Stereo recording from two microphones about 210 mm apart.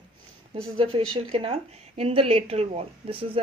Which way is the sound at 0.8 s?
25° right (ahead or behind).